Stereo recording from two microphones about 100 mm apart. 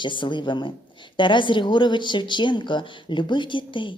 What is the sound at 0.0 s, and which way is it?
A woman's voice, 55° left (ahead or behind).